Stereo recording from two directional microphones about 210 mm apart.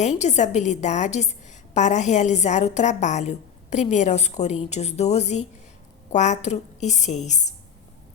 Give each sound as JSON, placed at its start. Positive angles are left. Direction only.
{"t": 0.0, "sound": "a woman's voice", "side_deg": 35}